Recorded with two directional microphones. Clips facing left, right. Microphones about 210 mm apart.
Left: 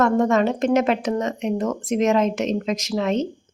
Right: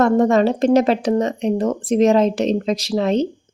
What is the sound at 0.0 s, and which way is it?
Speech, 35° right (ahead or behind).